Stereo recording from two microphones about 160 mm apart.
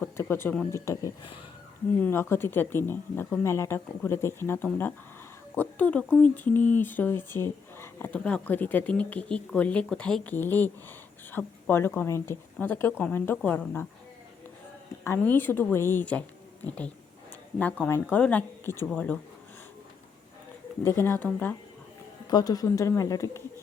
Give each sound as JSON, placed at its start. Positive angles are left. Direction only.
{"t": 0.0, "sound": "speech", "side_deg": 15}
{"t": 2.0, "sound": "speech", "side_deg": 15}
{"t": 15.0, "sound": "speech", "side_deg": 15}
{"t": 17.6, "sound": "speech", "side_deg": 10}
{"t": 20.8, "sound": "speech", "side_deg": 15}
{"t": 22.3, "sound": "speech", "side_deg": 25}